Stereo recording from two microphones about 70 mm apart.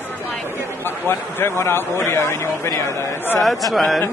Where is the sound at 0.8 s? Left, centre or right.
Left.